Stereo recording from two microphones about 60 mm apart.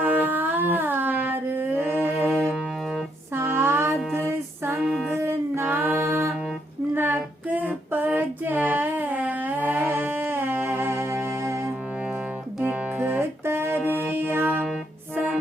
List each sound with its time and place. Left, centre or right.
0.0 s a sound: right
4.1 s female singing: right
12.6 s music: right